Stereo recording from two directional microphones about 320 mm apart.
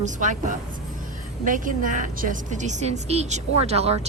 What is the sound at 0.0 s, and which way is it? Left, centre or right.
A woman's voice, right.